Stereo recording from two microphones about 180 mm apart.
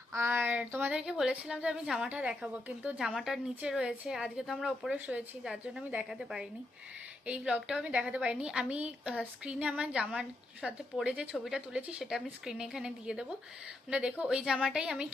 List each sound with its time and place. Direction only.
0.1 s speech: 10° right (ahead or behind)